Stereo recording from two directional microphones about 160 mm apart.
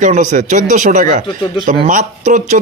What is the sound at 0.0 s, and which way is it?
Speech, 50° right (ahead or behind).